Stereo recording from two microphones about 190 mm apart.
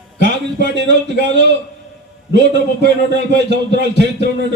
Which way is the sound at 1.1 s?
65° right (ahead or behind).